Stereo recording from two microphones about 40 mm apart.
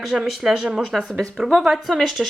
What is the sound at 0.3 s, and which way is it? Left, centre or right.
Speech, centre.